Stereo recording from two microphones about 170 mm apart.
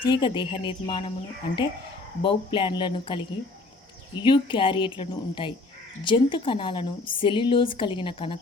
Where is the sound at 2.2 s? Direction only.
30° left (ahead or behind).